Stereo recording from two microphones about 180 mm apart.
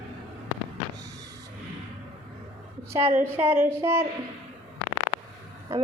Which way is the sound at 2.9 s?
15° right (ahead or behind).